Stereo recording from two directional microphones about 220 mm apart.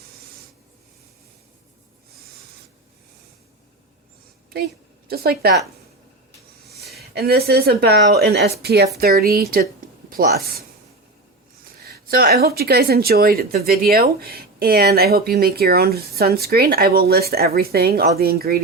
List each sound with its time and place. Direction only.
5.0 s speech: 45° right (ahead or behind)
6.9 s a woman's voice: 45° right (ahead or behind)
11.8 s speech: 45° right (ahead or behind)